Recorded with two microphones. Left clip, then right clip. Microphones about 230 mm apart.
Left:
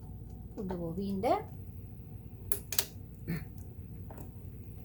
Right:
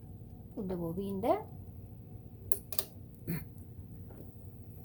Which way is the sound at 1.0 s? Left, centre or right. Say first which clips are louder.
Left 1 dB; right.